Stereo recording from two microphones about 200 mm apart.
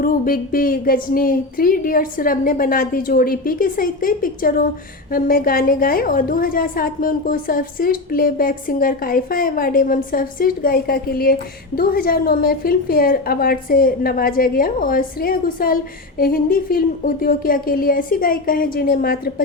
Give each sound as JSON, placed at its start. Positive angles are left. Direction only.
{"t": 0.0, "sound": "a woman's voice", "side_deg": 45}